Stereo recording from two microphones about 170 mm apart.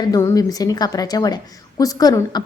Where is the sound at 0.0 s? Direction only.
20° left (ahead or behind).